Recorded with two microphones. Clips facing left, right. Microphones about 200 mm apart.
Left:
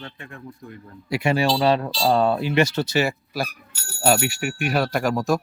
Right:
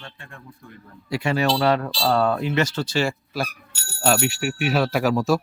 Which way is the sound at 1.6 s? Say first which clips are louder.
Left 1 dB; 25° left (ahead or behind).